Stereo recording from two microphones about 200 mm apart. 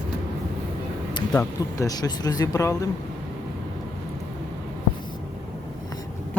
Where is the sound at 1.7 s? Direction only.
20° left (ahead or behind).